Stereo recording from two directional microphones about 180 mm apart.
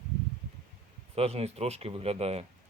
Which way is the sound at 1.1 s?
35° right (ahead or behind).